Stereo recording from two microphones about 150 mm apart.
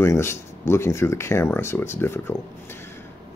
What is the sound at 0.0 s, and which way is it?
Speech, 20° left (ahead or behind).